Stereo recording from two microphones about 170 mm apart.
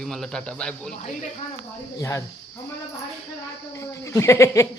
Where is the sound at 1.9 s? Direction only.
20° left (ahead or behind).